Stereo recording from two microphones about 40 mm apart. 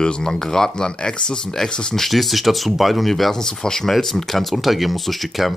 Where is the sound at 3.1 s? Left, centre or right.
Centre.